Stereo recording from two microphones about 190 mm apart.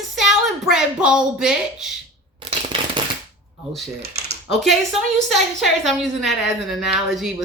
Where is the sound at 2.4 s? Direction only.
25° right (ahead or behind).